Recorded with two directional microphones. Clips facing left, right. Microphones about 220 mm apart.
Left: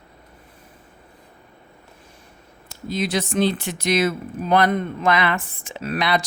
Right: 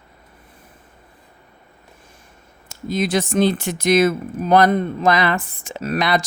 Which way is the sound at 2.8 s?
50° right (ahead or behind).